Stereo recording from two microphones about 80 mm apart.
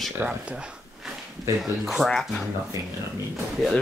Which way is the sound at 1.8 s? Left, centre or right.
Centre.